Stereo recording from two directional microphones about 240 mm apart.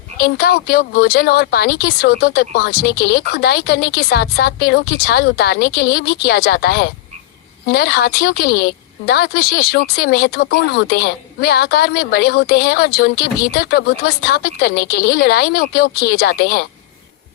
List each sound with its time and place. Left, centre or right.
0.2 s a woman's voice: left